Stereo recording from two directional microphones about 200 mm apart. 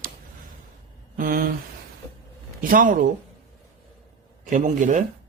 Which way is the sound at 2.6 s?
45° right (ahead or behind).